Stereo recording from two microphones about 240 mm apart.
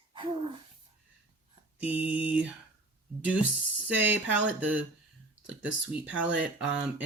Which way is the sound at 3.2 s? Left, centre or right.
Centre.